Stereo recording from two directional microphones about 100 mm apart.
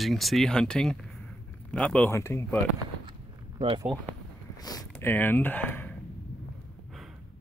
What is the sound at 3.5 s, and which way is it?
Speech, 70° right (ahead or behind).